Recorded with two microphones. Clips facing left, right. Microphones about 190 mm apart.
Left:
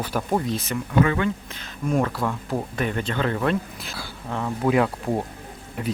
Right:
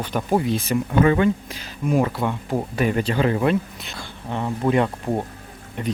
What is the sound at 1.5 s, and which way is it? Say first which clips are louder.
Speech: right 3 dB; 5° right (ahead or behind).